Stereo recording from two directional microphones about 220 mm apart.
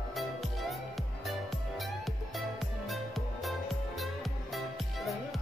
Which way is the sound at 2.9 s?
Centre (ahead or behind).